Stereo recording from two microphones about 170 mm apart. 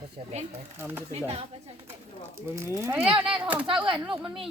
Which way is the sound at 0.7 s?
15° right (ahead or behind).